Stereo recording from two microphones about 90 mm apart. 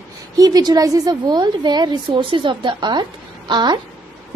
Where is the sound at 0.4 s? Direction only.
50° right (ahead or behind).